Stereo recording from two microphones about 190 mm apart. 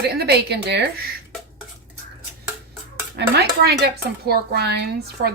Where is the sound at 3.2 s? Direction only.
55° right (ahead or behind).